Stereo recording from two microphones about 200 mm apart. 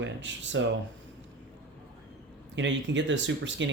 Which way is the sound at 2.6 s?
65° right (ahead or behind).